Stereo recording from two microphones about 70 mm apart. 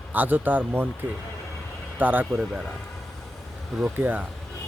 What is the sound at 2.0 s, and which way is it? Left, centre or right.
Speech, right.